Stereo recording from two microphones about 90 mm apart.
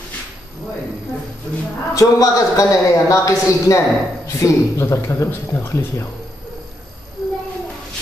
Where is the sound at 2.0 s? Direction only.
40° left (ahead or behind).